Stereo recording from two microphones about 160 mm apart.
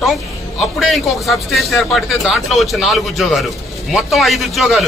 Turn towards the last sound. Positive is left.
turn(degrees=0)  # may be behind; listen again after turning